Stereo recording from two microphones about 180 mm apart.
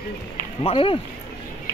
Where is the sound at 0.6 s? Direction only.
30° left (ahead or behind).